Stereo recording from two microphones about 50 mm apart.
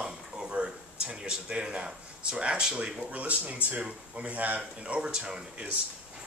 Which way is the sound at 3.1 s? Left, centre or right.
Right.